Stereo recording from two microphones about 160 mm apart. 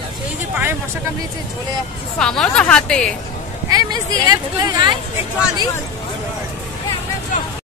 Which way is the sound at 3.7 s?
25° right (ahead or behind).